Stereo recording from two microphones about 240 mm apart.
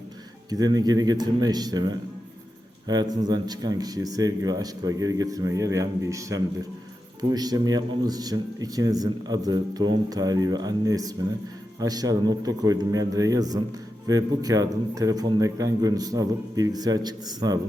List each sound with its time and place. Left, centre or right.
0.5 s speech: centre